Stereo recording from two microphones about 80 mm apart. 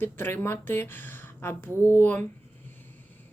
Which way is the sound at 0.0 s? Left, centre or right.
Left.